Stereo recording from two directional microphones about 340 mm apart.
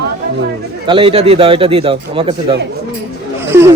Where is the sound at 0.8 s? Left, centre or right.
Centre.